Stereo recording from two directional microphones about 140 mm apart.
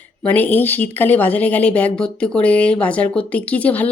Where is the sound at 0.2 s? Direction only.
10° left (ahead or behind).